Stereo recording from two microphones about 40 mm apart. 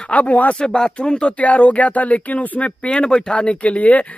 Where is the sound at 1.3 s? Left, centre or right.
Left.